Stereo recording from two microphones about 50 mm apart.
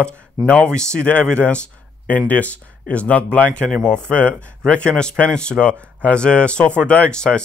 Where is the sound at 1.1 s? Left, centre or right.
Left.